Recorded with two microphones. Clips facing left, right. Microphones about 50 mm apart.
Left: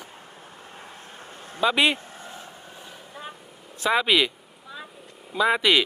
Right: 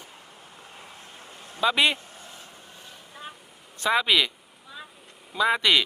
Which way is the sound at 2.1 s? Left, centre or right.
Left.